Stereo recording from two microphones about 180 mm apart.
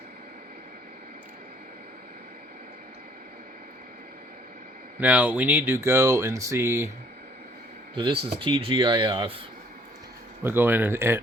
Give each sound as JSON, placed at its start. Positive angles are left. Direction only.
{"t": 4.9, "sound": "speech", "side_deg": -10}
{"t": 7.9, "sound": "speech", "side_deg": -30}
{"t": 10.4, "sound": "speech", "side_deg": -10}